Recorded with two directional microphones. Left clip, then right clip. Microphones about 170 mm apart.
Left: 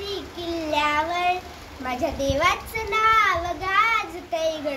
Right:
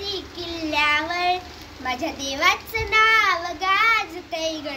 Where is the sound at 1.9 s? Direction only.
15° left (ahead or behind).